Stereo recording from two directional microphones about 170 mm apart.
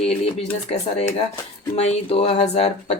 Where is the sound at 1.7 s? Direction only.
35° left (ahead or behind).